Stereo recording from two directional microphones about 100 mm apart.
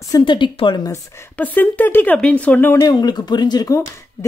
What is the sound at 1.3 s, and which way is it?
Speech, 15° left (ahead or behind).